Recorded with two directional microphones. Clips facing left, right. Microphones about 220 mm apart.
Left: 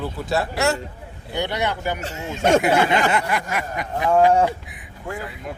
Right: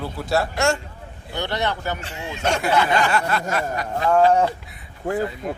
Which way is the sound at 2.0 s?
40° left (ahead or behind).